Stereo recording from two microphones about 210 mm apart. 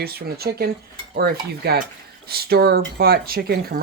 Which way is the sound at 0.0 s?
50° right (ahead or behind).